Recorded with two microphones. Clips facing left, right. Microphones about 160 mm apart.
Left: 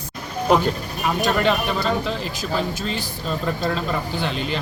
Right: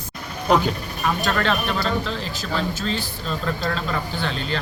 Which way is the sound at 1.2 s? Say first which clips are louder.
Left 4 dB; 10° left (ahead or behind).